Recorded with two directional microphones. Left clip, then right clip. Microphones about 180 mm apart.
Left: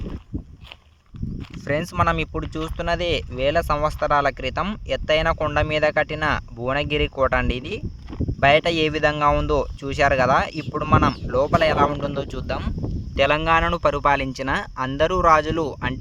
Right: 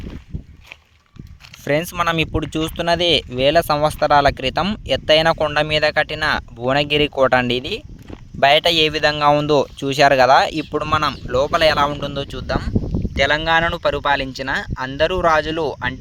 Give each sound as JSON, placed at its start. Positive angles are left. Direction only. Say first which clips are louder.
{"t": 1.6, "sound": "speech", "louder": "right 3 dB", "side_deg": -40}